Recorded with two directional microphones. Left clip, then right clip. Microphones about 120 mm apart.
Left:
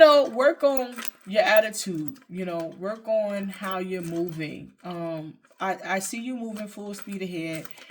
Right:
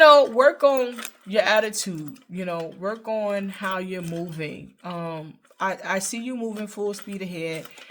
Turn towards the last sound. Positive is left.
turn(degrees=-50)  # may be behind; listen again after turning